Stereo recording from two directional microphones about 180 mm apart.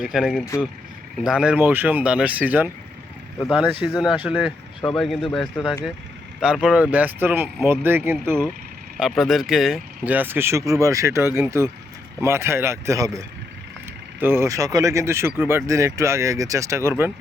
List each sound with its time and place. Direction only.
0.0 s speech: centre (ahead or behind)
0.4 s speech: 15° left (ahead or behind)
1.2 s speech: 5° right (ahead or behind)
9.0 s speech: centre (ahead or behind)